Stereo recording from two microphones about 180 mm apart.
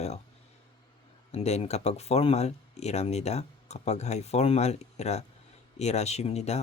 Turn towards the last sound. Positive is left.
turn(degrees=35)  # may be behind; listen again after turning